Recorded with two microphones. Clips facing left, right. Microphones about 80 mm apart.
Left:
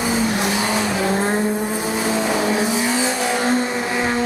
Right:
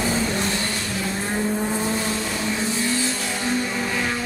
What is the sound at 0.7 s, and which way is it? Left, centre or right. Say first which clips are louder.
Vehicle: left 8 dB; left.